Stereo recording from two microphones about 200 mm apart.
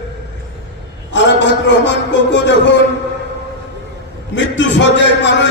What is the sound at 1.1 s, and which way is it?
A man's voice, 65° left (ahead or behind).